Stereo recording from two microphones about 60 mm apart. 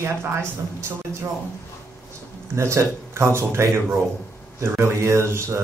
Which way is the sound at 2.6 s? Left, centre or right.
Right.